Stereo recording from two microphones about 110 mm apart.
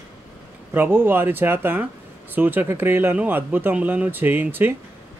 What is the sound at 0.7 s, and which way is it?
Speech, 20° right (ahead or behind).